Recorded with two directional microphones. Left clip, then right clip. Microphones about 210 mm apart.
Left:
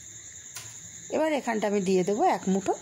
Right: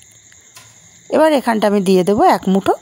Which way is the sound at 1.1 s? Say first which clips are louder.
Right 14 dB; 40° right (ahead or behind).